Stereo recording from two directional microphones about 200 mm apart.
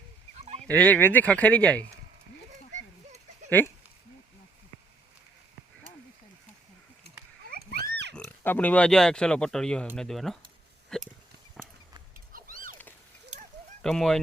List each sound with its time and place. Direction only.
0.3 s fowl: 35° right (ahead or behind)
0.7 s speech: 10° left (ahead or behind)
3.6 s speech: 10° left (ahead or behind)
7.8 s pig: 60° right (ahead or behind)
8.1 s speech: 10° left (ahead or behind)
11.6 s clip-clop: centre (ahead or behind)
13.8 s speech: 5° left (ahead or behind)